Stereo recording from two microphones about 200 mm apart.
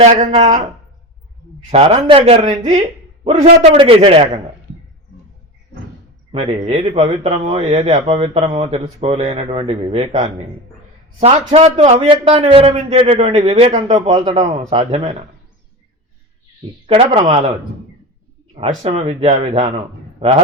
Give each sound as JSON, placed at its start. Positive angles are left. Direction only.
{"t": 0.0, "sound": "speech", "side_deg": -40}
{"t": 1.7, "sound": "speech", "side_deg": -30}
{"t": 6.3, "sound": "speech", "side_deg": -30}
{"t": 11.2, "sound": "speech", "side_deg": -30}
{"t": 16.8, "sound": "speech", "side_deg": -30}
{"t": 18.8, "sound": "speech", "side_deg": -30}